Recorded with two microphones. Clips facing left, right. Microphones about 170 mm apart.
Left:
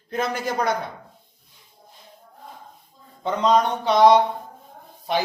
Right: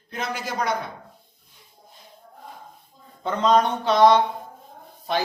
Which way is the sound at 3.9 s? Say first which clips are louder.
Left 2 dB; 10° left (ahead or behind).